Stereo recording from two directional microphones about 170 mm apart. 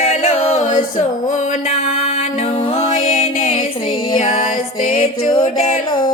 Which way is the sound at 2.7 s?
45° left (ahead or behind).